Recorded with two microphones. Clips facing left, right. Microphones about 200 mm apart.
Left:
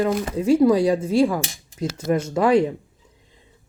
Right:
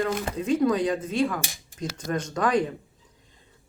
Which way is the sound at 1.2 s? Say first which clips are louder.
Left 6 dB; 25° left (ahead or behind).